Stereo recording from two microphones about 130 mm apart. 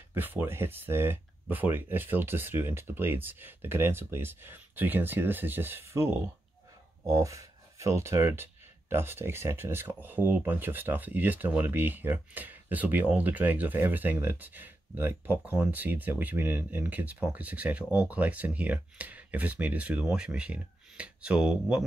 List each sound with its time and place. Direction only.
0.1 s speech: 15° right (ahead or behind)